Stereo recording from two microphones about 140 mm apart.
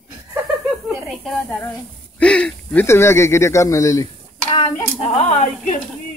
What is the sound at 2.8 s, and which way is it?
Speech, 20° left (ahead or behind).